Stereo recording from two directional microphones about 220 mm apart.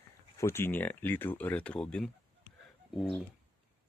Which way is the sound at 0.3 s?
10° left (ahead or behind).